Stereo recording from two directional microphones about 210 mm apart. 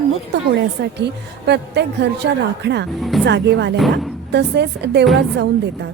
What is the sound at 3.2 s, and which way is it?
A woman's voice, 55° right (ahead or behind).